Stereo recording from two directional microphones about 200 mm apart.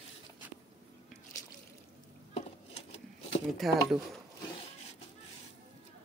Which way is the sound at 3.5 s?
Centre (ahead or behind).